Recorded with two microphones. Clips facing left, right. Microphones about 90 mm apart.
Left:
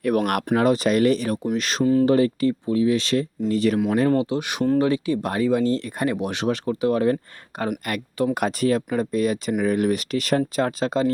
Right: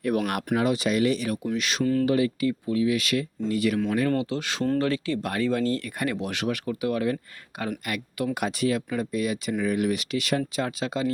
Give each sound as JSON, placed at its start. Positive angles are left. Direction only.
{"t": 0.0, "sound": "speech", "side_deg": 55}
{"t": 0.5, "sound": "speech", "side_deg": 45}
{"t": 1.8, "sound": "speech", "side_deg": 20}
{"t": 2.0, "sound": "speech", "side_deg": 35}
{"t": 4.1, "sound": "speech", "side_deg": 20}